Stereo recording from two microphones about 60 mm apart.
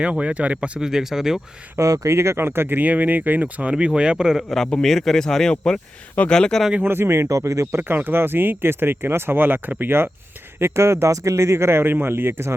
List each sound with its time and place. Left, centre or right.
0.0 s speech: right
0.9 s speech: centre
1.8 s speech: right
2.1 s speech: right; by 4.4 s centre
4.4 s a man's voice: centre
4.6 s speech: centre
6.8 s speech: right
7.3 s speech: right
7.8 s speech: right
10.6 s speech: right